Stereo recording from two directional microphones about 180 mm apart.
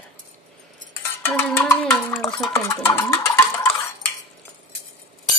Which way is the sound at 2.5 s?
20° left (ahead or behind).